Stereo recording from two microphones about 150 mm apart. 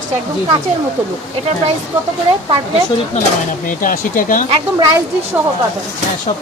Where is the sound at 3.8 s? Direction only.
65° left (ahead or behind).